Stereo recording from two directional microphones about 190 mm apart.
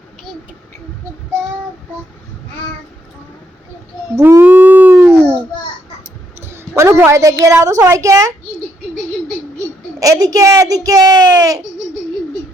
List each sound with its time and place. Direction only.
4.1 s howl: 15° right (ahead or behind)
6.4 s a sound: 15° right (ahead or behind)
7.4 s speech: 15° right (ahead or behind)
10.0 s a child's voice: 20° right (ahead or behind)